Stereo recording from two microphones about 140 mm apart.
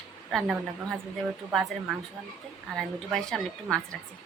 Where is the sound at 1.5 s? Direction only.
Centre (ahead or behind).